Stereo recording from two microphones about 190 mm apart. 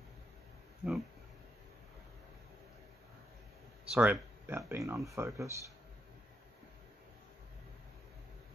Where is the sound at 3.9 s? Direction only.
10° right (ahead or behind).